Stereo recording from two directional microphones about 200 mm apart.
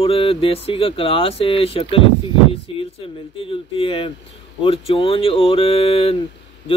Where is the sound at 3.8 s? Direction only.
25° left (ahead or behind).